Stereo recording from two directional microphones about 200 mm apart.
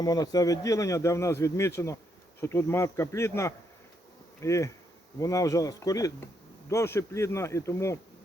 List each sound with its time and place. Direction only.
0.0 s speech: 20° left (ahead or behind)
4.4 s bee: 15° left (ahead or behind)
5.2 s speech: 15° left (ahead or behind)